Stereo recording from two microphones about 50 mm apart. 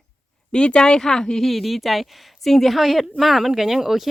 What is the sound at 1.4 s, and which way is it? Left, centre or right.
A woman's voice, centre.